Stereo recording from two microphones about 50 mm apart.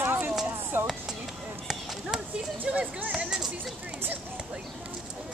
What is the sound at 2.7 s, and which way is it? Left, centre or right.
Speech, right.